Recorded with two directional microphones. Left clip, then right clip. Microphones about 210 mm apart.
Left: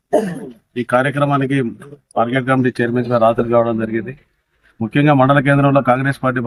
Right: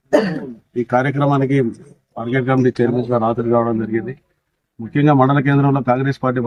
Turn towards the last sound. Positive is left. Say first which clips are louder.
# left 1 dB
turn(degrees=5)  # may be behind; listen again after turning